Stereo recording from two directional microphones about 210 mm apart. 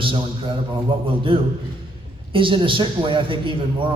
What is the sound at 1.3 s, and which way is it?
A man's voice, 25° right (ahead or behind).